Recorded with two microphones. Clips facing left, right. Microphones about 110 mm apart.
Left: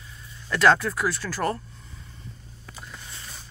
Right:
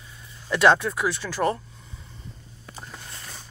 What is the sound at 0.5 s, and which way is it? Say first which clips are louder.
Speech: right 1 dB; 10° right (ahead or behind).